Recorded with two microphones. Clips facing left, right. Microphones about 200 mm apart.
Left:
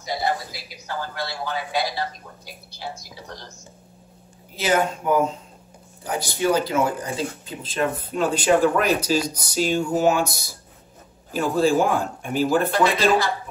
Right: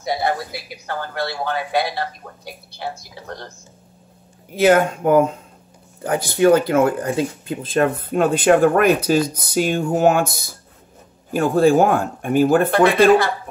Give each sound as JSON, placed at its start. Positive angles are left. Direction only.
{"t": 0.0, "sound": "speech", "side_deg": -55}
{"t": 4.6, "sound": "speech", "side_deg": -55}